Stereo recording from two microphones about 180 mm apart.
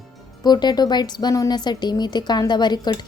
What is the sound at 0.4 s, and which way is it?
Speech, 25° left (ahead or behind).